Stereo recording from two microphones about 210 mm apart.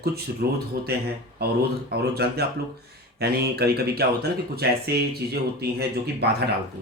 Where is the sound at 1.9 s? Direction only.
50° right (ahead or behind).